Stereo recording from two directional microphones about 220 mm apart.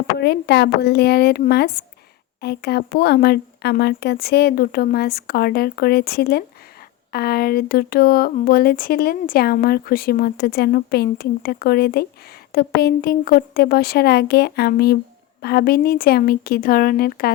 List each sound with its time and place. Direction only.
0.2 s speech: 50° left (ahead or behind)